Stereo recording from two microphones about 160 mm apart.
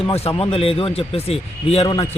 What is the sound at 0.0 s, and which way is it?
A man's voice, 35° left (ahead or behind).